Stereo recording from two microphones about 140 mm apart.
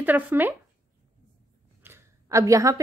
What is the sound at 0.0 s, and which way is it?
Speech, 15° right (ahead or behind).